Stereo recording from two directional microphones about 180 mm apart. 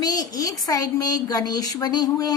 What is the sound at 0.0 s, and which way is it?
A woman's voice, 20° left (ahead or behind).